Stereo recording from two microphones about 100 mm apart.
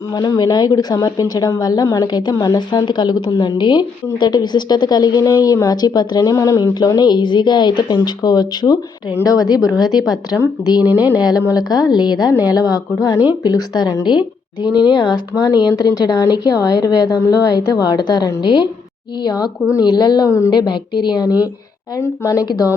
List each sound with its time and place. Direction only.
0.1 s a woman's voice: 40° left (ahead or behind)
10.8 s speech: 15° right (ahead or behind)
11.2 s a woman's voice: 40° left (ahead or behind)